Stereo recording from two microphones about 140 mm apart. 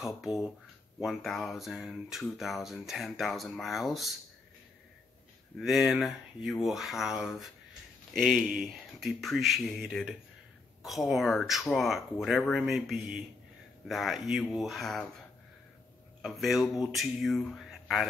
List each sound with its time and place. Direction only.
0.0 s speech: 5° right (ahead or behind)
5.6 s speech: 5° right (ahead or behind)